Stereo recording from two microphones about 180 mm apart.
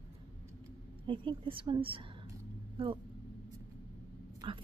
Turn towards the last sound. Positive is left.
turn(degrees=-30)  # may be behind; listen again after turning